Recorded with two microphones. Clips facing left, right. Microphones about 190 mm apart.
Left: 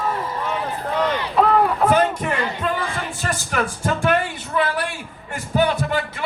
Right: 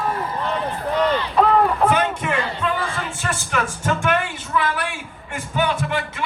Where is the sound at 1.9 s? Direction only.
40° left (ahead or behind).